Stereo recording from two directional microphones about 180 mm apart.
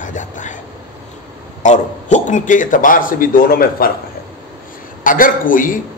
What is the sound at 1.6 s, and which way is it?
A man's voice, 40° left (ahead or behind).